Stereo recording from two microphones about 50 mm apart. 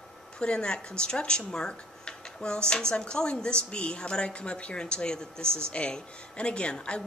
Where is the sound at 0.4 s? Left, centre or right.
Centre.